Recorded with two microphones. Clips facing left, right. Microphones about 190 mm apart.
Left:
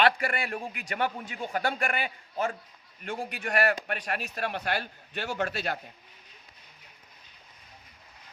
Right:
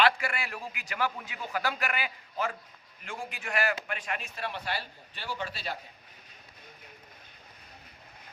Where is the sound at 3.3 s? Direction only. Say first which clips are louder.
Left 4 dB; 60° left (ahead or behind).